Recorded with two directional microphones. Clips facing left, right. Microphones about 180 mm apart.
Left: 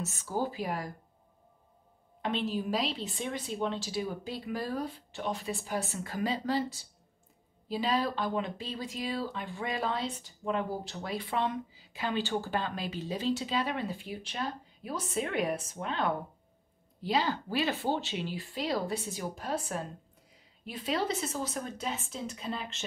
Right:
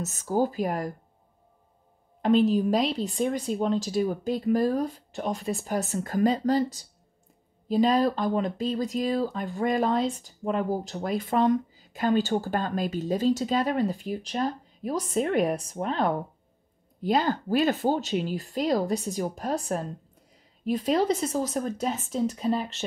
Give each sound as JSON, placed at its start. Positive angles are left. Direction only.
{"t": 0.0, "sound": "speech", "side_deg": -45}
{"t": 2.2, "sound": "a woman's voice", "side_deg": -40}